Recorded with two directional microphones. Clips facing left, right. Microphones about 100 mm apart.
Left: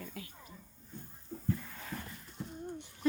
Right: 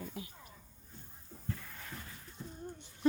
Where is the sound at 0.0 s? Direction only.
20° right (ahead or behind).